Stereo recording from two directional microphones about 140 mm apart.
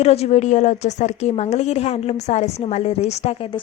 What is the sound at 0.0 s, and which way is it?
A woman's voice, 50° left (ahead or behind).